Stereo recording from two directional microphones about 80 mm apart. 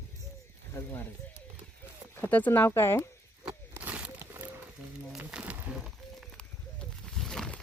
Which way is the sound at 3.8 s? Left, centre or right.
Centre.